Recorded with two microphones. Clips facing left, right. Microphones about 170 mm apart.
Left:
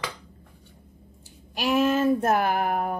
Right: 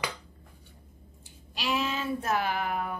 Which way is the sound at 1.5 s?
50° left (ahead or behind).